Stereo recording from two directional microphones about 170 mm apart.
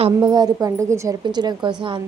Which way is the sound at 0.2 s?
25° right (ahead or behind).